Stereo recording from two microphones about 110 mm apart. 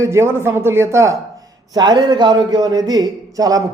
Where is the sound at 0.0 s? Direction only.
25° right (ahead or behind).